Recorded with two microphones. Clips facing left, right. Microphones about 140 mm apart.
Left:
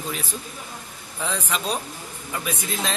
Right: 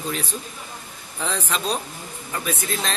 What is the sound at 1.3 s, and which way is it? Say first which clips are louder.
Speech: right 1 dB; 10° left (ahead or behind).